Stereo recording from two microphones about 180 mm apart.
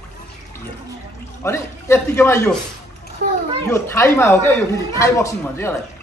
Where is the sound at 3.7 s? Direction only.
15° left (ahead or behind).